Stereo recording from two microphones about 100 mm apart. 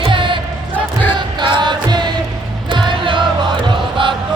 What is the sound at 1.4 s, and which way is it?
Music, 50° right (ahead or behind).